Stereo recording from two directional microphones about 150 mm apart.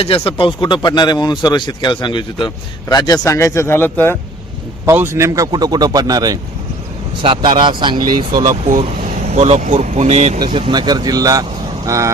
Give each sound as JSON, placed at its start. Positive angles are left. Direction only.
{"t": 0.0, "sound": "speech", "side_deg": 35}
{"t": 2.9, "sound": "speech", "side_deg": 20}
{"t": 4.9, "sound": "speech", "side_deg": -20}
{"t": 7.2, "sound": "speech", "side_deg": -35}
{"t": 8.4, "sound": "speech", "side_deg": -60}
{"t": 9.3, "sound": "speech", "side_deg": -45}
{"t": 10.4, "sound": "speech", "side_deg": -30}